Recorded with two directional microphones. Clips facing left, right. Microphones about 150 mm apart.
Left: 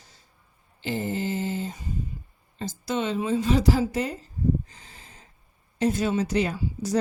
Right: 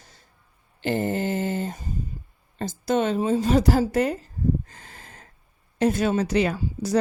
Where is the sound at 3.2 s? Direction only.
40° right (ahead or behind); by 4.2 s 60° right (ahead or behind).